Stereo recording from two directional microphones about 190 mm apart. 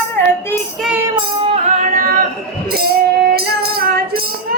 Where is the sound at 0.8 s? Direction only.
10° right (ahead or behind).